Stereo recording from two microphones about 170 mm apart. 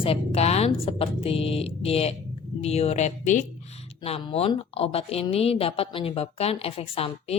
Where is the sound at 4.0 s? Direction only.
30° left (ahead or behind).